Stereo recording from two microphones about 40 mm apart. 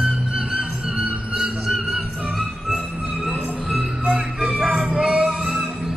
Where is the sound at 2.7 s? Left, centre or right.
Right.